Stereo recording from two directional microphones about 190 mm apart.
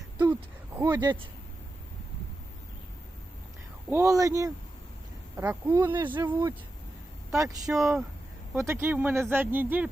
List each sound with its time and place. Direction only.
0.3 s speech: 15° right (ahead or behind)
3.8 s speech: 15° right (ahead or behind)
7.8 s speech: centre (ahead or behind)
8.5 s speech: 10° right (ahead or behind)